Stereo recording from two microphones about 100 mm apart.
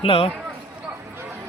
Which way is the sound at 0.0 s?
70° left (ahead or behind).